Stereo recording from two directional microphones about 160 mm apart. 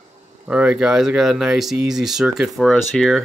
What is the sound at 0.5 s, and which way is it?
Speech, 5° right (ahead or behind).